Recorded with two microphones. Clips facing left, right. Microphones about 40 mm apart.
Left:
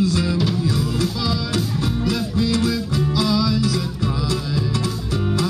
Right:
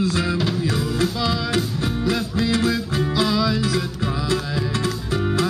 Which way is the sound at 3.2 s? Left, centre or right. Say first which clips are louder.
Even; right.